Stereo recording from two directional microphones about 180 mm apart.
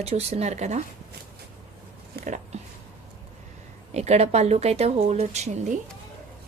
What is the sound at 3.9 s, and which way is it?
A woman's voice, 35° right (ahead or behind).